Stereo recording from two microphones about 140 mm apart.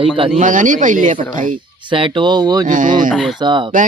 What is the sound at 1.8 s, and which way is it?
Speech, 35° right (ahead or behind).